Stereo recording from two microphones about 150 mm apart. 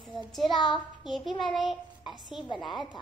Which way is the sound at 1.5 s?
30° left (ahead or behind).